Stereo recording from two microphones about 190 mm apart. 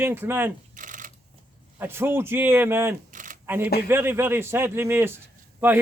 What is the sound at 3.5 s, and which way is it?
A man's voice, 10° right (ahead or behind).